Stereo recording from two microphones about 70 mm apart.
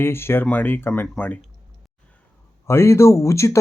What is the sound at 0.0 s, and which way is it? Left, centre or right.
Speech, left.